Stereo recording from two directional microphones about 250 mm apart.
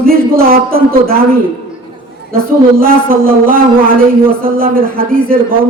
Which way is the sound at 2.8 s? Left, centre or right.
Right.